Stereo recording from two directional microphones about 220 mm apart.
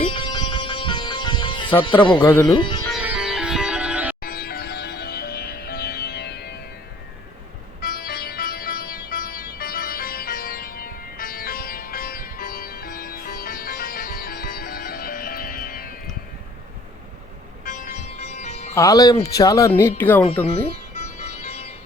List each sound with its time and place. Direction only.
0.0 s music: 20° left (ahead or behind)
1.8 s speech: 20° left (ahead or behind)
3.0 s music: 5° right (ahead or behind)
4.2 s music: 40° left (ahead or behind)
7.8 s music: 45° left (ahead or behind)
17.7 s music: 35° left (ahead or behind)
18.7 s speech: 15° left (ahead or behind)